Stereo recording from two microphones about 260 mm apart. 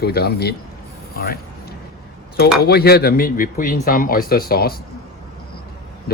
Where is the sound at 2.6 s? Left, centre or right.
Left.